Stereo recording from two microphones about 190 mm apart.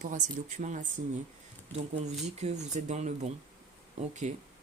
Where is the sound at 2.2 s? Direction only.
35° right (ahead or behind).